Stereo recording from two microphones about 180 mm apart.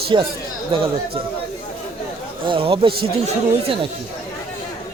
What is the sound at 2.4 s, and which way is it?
Speech, 30° right (ahead or behind).